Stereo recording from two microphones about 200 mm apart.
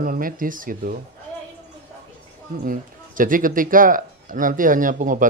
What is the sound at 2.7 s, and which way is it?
Speech, 45° right (ahead or behind).